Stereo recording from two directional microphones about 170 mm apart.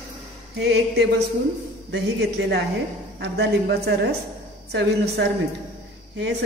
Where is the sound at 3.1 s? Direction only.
75° right (ahead or behind).